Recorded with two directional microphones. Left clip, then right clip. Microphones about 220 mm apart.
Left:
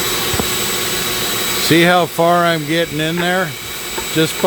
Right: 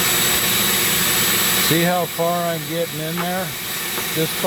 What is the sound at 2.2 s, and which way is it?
Speech, 45° left (ahead or behind).